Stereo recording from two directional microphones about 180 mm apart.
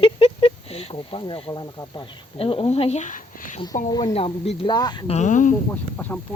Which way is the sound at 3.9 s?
20° left (ahead or behind).